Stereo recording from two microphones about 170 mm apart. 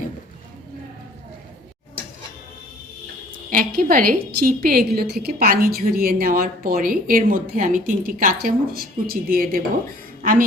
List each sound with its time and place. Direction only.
3.5 s a woman's voice: 55° right (ahead or behind)